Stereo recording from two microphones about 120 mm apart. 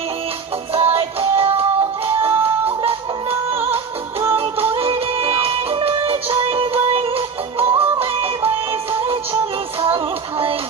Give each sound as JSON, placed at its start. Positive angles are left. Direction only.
{"t": 0.7, "sound": "music", "side_deg": -55}